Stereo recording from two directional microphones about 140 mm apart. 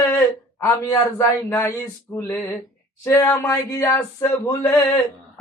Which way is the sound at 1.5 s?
15° left (ahead or behind).